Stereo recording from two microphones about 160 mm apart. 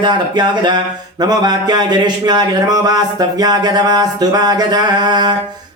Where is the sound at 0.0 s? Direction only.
30° right (ahead or behind).